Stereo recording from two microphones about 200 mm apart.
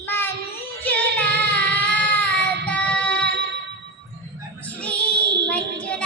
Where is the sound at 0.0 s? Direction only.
10° left (ahead or behind).